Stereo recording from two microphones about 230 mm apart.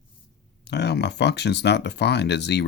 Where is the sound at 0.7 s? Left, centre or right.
Left.